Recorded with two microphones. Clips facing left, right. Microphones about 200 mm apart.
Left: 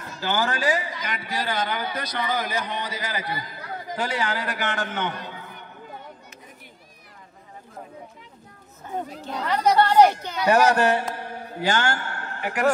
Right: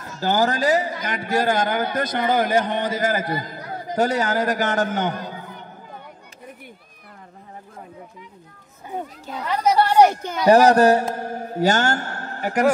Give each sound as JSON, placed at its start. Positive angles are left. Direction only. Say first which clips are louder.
{"t": 0.2, "sound": "a man's voice", "louder": "right 5 dB", "side_deg": -40}
{"t": 8.8, "sound": "chatter", "louder": "even", "side_deg": -10}
{"t": 10.4, "sound": "speech", "louder": "right 6 dB", "side_deg": -35}
{"t": 11.1, "sound": "a sound", "louder": "right 7 dB", "side_deg": -45}